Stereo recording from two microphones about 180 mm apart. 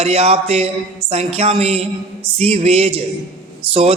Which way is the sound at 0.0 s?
35° right (ahead or behind).